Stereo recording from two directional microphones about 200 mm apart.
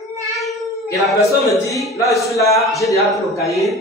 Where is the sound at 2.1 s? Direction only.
Centre (ahead or behind).